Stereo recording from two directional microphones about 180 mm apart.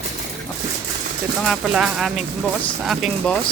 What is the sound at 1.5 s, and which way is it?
Speech, 5° right (ahead or behind).